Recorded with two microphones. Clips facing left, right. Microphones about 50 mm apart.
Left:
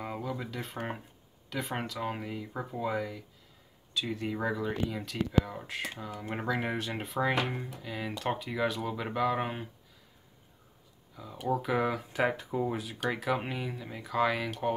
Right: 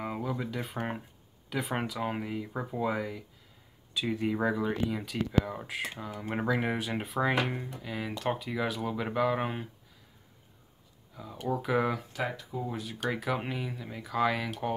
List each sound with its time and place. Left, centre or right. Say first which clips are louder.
0.0 s speech: right 2 dB; centre
11.1 s speech: left 1 dB; centre
12.1 s speech: left 5 dB; left
12.7 s speech: even; centre